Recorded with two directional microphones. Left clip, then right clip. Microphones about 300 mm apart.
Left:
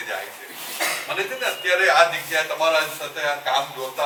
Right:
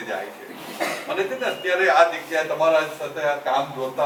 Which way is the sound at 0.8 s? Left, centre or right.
Centre.